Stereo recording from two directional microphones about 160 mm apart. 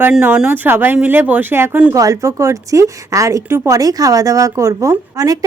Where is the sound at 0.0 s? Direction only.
10° right (ahead or behind).